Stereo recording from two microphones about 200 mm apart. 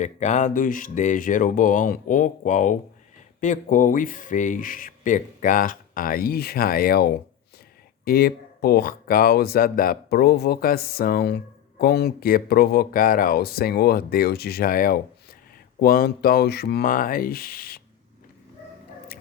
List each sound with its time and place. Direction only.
0.0 s speech: 35° left (ahead or behind)